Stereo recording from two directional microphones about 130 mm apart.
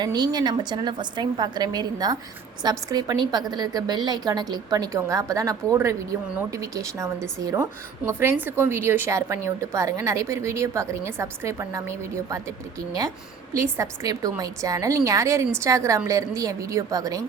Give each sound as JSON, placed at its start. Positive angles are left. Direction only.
{"t": 0.0, "sound": "a woman's voice", "side_deg": -30}
{"t": 13.5, "sound": "a woman's voice", "side_deg": -25}